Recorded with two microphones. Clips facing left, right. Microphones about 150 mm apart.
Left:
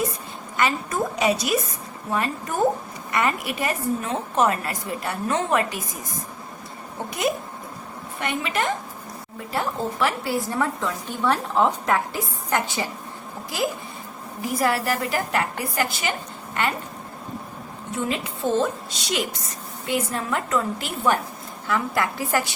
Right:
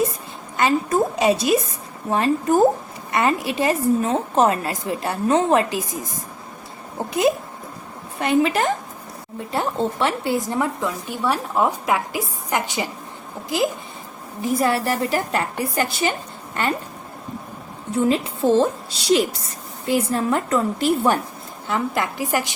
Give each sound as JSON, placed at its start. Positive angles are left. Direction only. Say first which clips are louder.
{"t": 0.5, "sound": "a woman's voice", "louder": "right 5 dB", "side_deg": -30}
{"t": 8.2, "sound": "a woman's voice", "louder": "right 7 dB", "side_deg": -35}
{"t": 14.4, "sound": "a woman's voice", "louder": "right 3 dB", "side_deg": -25}
{"t": 17.9, "sound": "a woman's voice", "louder": "right 8 dB", "side_deg": -35}
{"t": 21.7, "sound": "a woman's voice", "louder": "right 1 dB", "side_deg": -20}